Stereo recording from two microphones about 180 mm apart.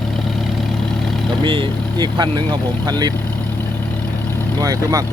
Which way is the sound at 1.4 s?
25° right (ahead or behind).